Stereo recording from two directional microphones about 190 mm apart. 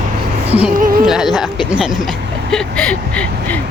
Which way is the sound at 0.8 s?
50° right (ahead or behind).